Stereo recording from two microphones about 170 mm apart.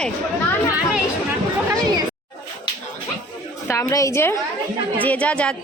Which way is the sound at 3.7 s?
20° left (ahead or behind).